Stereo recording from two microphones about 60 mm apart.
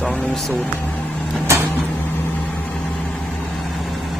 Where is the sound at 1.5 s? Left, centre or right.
Right.